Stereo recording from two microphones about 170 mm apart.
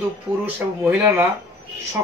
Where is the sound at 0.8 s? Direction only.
10° right (ahead or behind).